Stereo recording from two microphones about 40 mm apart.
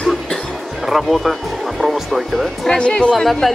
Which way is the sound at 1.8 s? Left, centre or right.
Centre.